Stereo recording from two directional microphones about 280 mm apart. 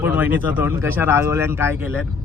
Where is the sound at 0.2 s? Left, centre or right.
Centre.